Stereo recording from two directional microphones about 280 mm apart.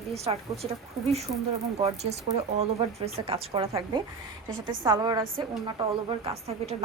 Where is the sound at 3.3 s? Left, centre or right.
Centre.